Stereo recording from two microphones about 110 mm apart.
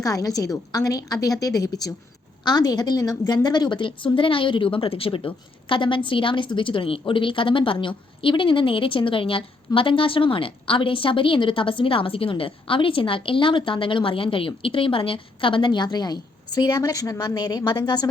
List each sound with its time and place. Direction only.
0.0 s a woman's voice: 35° left (ahead or behind)